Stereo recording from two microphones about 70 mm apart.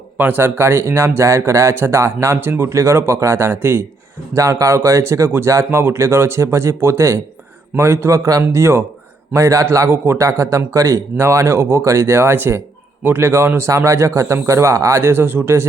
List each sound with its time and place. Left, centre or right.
0.2 s speech: right
4.4 s speech: right
9.3 s speech: right